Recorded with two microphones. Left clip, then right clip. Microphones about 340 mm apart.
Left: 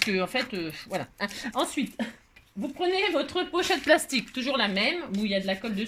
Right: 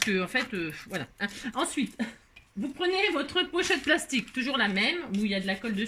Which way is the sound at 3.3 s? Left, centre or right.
Centre.